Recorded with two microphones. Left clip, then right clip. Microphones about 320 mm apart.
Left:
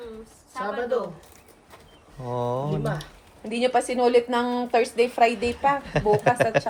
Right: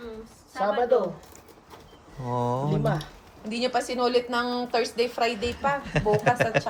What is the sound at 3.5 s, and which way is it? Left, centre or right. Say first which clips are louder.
A woman's voice: left 4 dB; left.